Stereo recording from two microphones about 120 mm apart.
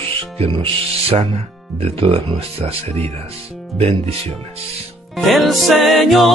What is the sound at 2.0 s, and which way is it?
Speech, 50° right (ahead or behind).